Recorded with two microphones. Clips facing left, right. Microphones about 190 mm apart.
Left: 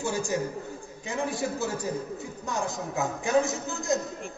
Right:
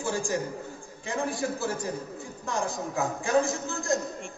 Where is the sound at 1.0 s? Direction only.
20° left (ahead or behind).